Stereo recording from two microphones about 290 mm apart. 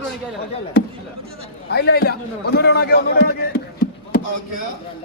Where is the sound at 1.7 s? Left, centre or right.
Left.